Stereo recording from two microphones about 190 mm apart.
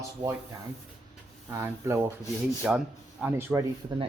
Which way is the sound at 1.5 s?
15° right (ahead or behind).